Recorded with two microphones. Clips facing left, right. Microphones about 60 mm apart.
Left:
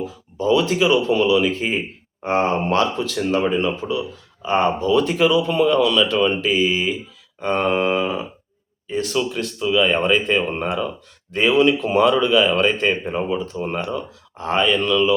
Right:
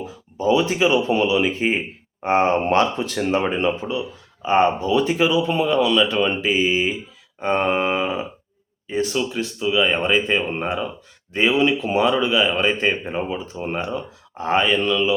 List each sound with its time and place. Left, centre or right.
0.0 s speech: centre